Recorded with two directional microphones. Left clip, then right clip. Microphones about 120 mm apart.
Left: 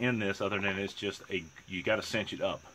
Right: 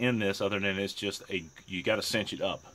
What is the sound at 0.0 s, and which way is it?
Speech, 30° right (ahead or behind).